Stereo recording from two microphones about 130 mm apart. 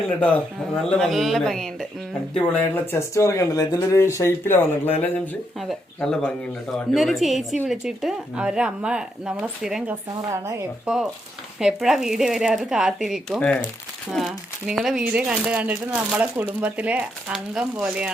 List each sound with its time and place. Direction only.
0.1 s speech: 10° left (ahead or behind)
5.5 s speech: centre (ahead or behind)